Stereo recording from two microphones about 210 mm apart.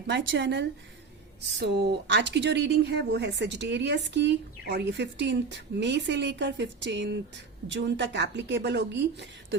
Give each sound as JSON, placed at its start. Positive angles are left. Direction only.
{"t": 0.1, "sound": "speech", "side_deg": -60}
{"t": 1.6, "sound": "speech", "side_deg": -50}